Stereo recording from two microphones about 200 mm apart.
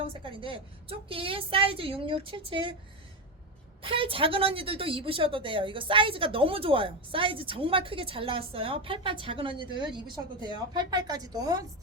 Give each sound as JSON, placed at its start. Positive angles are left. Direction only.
{"t": 0.0, "sound": "a woman's voice", "side_deg": -25}
{"t": 3.8, "sound": "a woman's voice", "side_deg": -25}